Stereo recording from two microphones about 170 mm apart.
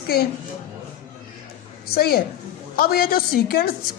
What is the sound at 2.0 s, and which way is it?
A woman's voice, 65° left (ahead or behind).